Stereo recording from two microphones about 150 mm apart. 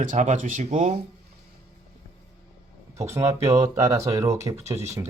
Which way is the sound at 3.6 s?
20° right (ahead or behind).